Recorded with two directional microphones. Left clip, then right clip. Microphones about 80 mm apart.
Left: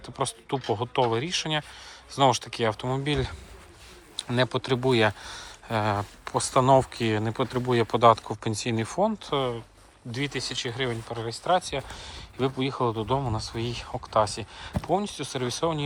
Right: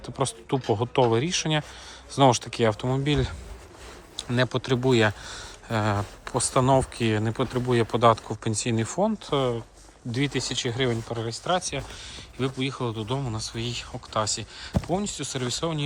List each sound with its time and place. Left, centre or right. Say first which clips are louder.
0.0 s speech: right 2 dB; right
2.1 s speech: right 2 dB; right
2.8 s speech: right 2 dB; right
4.4 s speech: even; right
9.1 s speech: right 2 dB; right
10.1 s speech: right 3 dB; right
11.4 s speech: left 2 dB; right
12.0 s a man's voice: left 2 dB; centre